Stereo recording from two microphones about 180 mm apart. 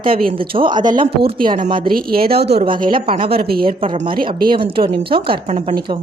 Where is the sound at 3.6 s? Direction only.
30° right (ahead or behind).